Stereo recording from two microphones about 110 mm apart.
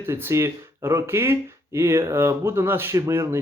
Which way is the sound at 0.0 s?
20° right (ahead or behind).